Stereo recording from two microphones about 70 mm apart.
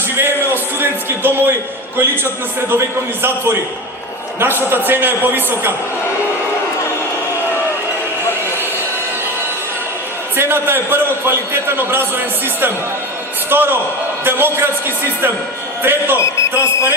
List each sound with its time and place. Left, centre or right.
0.2 s a man's voice: right
2.6 s a man's voice: right
10.3 s a man's voice: right
16.1 s a man's voice: left